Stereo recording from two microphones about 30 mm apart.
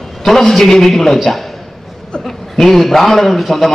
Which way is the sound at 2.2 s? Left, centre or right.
Centre.